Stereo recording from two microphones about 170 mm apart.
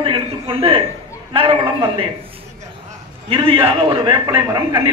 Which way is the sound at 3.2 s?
35° right (ahead or behind).